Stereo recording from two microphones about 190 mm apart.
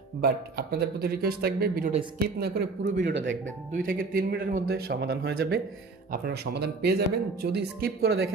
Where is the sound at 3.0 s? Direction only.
70° right (ahead or behind).